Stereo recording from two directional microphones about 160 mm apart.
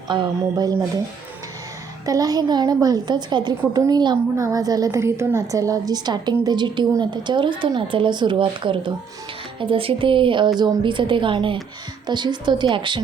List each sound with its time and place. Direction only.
0.1 s a woman's voice: 25° right (ahead or behind)
2.0 s a woman's voice: 20° right (ahead or behind)